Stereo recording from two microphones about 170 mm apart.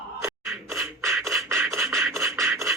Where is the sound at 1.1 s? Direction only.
Centre (ahead or behind).